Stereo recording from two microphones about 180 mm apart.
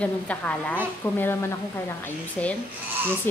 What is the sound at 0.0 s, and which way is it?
Speech, 5° left (ahead or behind).